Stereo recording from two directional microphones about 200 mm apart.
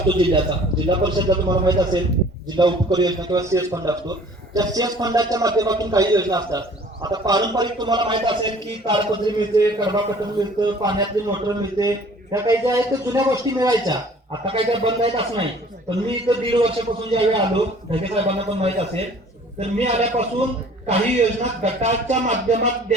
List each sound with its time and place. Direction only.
0.1 s a man's voice: 25° right (ahead or behind)